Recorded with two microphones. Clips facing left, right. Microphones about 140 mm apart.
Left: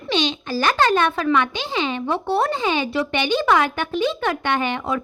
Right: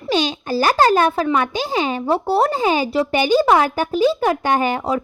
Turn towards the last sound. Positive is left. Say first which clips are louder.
# right 4 dB
turn(degrees=-35)  # may be behind; listen again after turning